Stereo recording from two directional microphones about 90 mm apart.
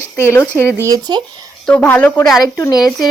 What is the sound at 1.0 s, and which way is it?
Speech, 50° right (ahead or behind).